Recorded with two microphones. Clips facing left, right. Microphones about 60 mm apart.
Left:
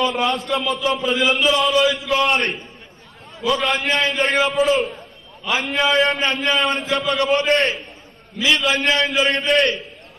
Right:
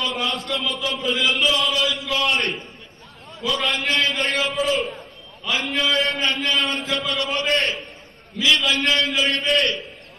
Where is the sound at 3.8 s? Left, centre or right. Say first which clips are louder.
Left 2 dB; centre.